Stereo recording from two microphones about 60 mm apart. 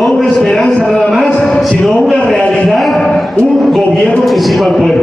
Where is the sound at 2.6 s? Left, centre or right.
Centre.